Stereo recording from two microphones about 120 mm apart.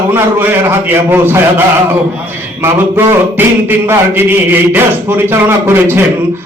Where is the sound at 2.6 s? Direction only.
15° right (ahead or behind).